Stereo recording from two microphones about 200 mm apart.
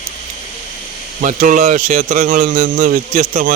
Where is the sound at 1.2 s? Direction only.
40° right (ahead or behind).